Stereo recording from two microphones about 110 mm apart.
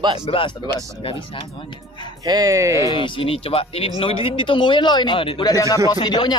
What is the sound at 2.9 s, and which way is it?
Speech, 50° left (ahead or behind).